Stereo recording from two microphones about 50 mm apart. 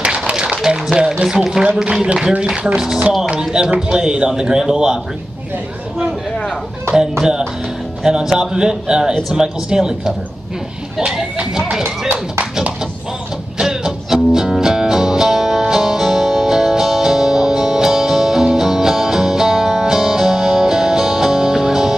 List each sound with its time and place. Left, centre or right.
0.0 s a sound: centre
0.9 s speech: centre
6.9 s speech: centre
13.6 s music: centre